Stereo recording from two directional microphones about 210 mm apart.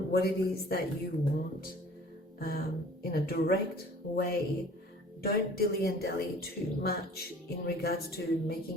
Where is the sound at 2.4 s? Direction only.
45° left (ahead or behind).